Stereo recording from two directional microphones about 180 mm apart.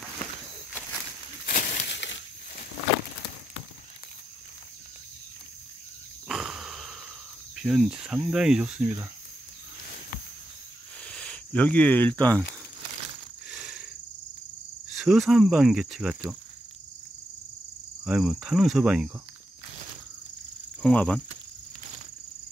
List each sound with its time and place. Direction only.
1.4 s a sound: 50° left (ahead or behind)
1.9 s crushing: 85° left
6.2 s a sound: centre (ahead or behind)
7.5 s speech: 5° right (ahead or behind)
11.1 s speech: 5° left (ahead or behind)
13.5 s a sound: 5° right (ahead or behind)
14.9 s speech: centre (ahead or behind)
18.0 s speech: 5° right (ahead or behind)
20.8 s speech: 5° left (ahead or behind)